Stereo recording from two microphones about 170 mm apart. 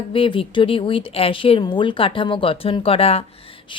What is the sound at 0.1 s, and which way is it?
Speech, 30° left (ahead or behind).